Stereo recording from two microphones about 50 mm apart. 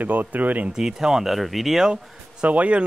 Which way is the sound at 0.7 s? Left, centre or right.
Centre.